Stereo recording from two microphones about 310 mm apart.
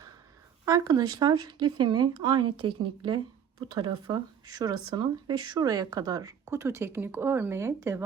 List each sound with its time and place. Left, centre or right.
0.6 s speech: centre